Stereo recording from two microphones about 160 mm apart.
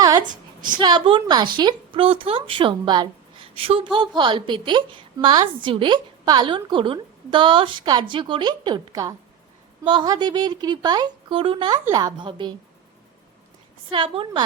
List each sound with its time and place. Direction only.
0.2 s a sound: 55° right (ahead or behind)
0.8 s a woman's voice: 30° right (ahead or behind)
13.9 s a woman's voice: 35° right (ahead or behind)